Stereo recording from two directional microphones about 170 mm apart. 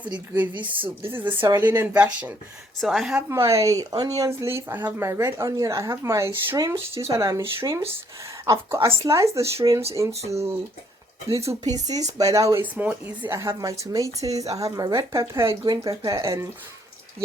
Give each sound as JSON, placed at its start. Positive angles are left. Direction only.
{"t": 0.1, "sound": "speech", "side_deg": -10}
{"t": 3.2, "sound": "speech", "side_deg": -15}
{"t": 10.1, "sound": "speech", "side_deg": -40}
{"t": 10.3, "sound": "speech", "side_deg": -15}
{"t": 11.6, "sound": "speech", "side_deg": -20}